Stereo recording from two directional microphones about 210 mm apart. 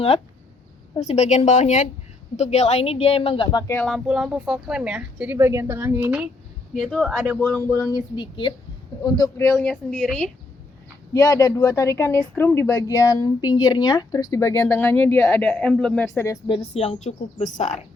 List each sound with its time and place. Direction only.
0.9 s speech: 30° left (ahead or behind); by 3.9 s 10° left (ahead or behind)
3.9 s speech: centre (ahead or behind)
7.7 s speech: 15° left (ahead or behind)
11.1 s speech: 15° left (ahead or behind)
16.6 s speech: 30° left (ahead or behind)